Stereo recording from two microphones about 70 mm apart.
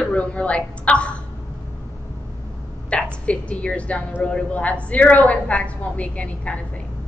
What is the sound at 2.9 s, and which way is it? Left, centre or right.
A woman's voice, centre.